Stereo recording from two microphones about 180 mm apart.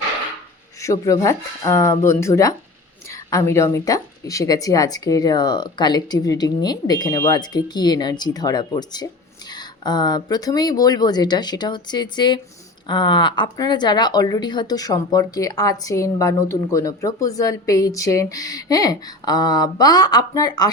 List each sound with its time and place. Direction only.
0.8 s speech: 15° left (ahead or behind)